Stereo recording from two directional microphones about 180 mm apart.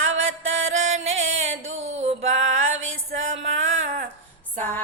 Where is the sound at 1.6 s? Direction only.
90° right.